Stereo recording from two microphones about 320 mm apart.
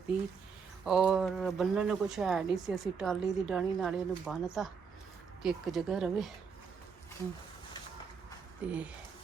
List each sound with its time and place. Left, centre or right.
0.9 s speech: centre
8.6 s speech: centre